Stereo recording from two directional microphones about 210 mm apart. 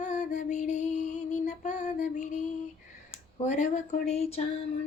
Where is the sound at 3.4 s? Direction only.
35° left (ahead or behind).